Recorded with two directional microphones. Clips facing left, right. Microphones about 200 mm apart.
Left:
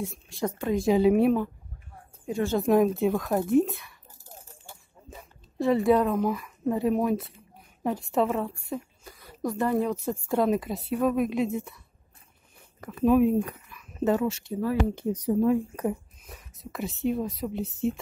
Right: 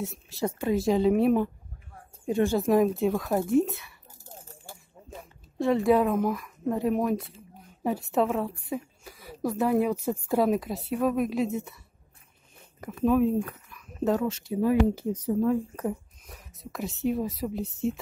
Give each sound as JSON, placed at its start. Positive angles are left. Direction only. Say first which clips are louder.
{"t": 0.0, "sound": "a woman's voice", "louder": "even", "side_deg": 0}
{"t": 2.6, "sound": "a woman's voice", "louder": "left 1 dB", "side_deg": 0}
{"t": 5.1, "sound": "a woman's voice", "louder": "even", "side_deg": 0}
{"t": 12.9, "sound": "speech", "louder": "left 2 dB", "side_deg": 10}
{"t": 13.7, "sound": "a sound", "louder": "even", "side_deg": 5}
{"t": 14.5, "sound": "speech", "louder": "right 7 dB", "side_deg": -15}
{"t": 15.2, "sound": "speech", "louder": "left 2 dB", "side_deg": 15}
{"t": 15.9, "sound": "speech", "louder": "left 1 dB", "side_deg": 0}